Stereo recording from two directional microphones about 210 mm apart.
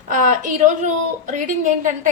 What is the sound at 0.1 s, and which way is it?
A woman's voice, 40° right (ahead or behind).